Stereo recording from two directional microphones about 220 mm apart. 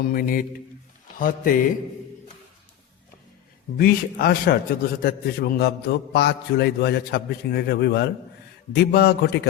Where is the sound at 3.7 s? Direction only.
40° left (ahead or behind).